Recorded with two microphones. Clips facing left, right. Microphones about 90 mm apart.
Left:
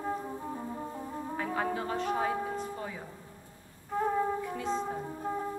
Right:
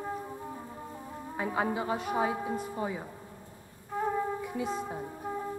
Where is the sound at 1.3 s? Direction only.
15° right (ahead or behind).